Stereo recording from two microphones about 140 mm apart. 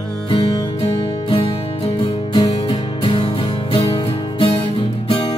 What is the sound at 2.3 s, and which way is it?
Music, 35° left (ahead or behind).